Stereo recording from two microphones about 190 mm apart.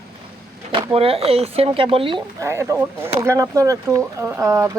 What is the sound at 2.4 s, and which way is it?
Speech, 15° right (ahead or behind).